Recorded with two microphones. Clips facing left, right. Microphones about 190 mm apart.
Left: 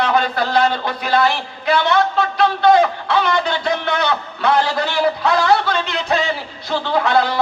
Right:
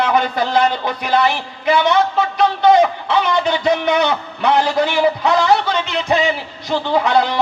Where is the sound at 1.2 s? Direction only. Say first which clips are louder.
Right 1 dB; 20° right (ahead or behind).